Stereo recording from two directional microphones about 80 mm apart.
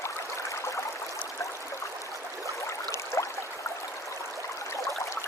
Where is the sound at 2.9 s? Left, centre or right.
Left.